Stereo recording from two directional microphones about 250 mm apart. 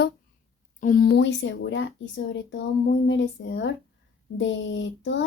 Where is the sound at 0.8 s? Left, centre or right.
Left.